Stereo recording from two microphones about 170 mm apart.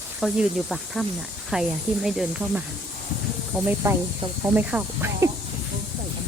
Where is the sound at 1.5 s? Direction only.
Centre (ahead or behind).